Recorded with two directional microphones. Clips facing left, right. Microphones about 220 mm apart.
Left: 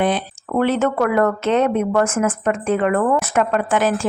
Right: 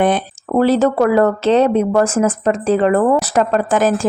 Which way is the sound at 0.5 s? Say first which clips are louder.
Right 5 dB; 35° right (ahead or behind).